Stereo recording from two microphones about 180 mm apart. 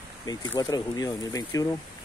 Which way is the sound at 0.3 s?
20° left (ahead or behind).